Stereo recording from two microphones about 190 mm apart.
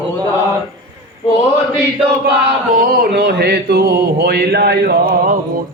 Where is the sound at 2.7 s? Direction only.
50° right (ahead or behind).